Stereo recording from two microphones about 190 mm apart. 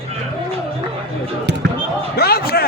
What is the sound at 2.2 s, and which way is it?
Speech, 55° left (ahead or behind).